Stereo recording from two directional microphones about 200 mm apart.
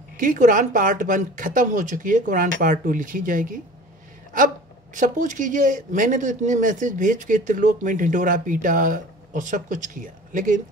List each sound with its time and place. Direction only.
0.2 s speech: 40° right (ahead or behind)
4.9 s speech: 40° right (ahead or behind)